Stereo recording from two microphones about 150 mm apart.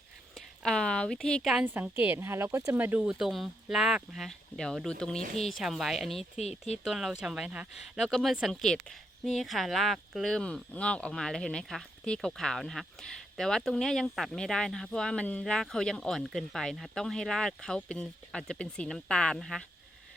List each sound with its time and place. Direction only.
0.3 s speech: 5° left (ahead or behind)
1.6 s speech: 15° right (ahead or behind)
6.3 s speech: 45° left (ahead or behind)
6.8 s speech: centre (ahead or behind)